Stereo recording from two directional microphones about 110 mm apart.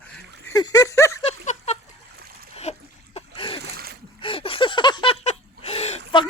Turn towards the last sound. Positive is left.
turn(degrees=70)  # may be behind; listen again after turning